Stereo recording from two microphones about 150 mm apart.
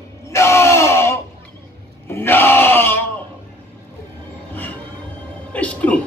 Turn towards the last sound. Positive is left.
turn(degrees=10)  # may be behind; listen again after turning